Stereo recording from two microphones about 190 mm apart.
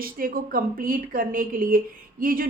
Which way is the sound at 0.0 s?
50° right (ahead or behind).